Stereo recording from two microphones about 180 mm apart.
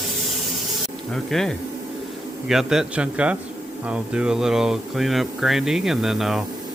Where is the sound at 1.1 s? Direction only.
5° left (ahead or behind).